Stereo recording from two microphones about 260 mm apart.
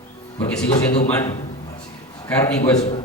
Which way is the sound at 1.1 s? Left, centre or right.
Centre.